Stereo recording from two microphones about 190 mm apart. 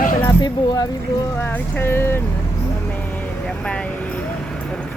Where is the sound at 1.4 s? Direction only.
10° left (ahead or behind).